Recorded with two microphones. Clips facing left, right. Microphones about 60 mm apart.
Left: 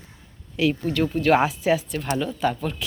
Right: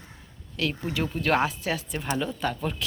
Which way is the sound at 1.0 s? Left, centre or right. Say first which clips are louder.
Left 5 dB; centre.